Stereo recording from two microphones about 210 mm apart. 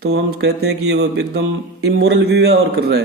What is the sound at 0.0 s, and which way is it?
Speech, 50° right (ahead or behind).